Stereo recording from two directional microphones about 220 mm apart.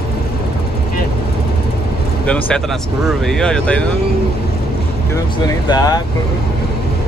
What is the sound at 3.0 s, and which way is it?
Speech, centre (ahead or behind).